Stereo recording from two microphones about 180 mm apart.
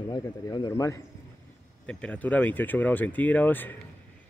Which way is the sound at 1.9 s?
5° left (ahead or behind).